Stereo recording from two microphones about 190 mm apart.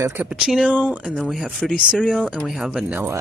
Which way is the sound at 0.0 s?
10° right (ahead or behind).